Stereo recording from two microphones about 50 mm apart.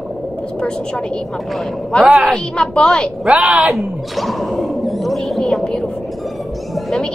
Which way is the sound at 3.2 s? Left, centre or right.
Right.